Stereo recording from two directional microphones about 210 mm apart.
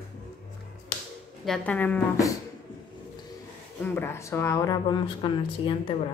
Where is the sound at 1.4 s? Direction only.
5° left (ahead or behind).